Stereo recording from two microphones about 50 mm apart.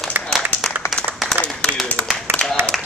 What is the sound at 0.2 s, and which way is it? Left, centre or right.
Applause, right.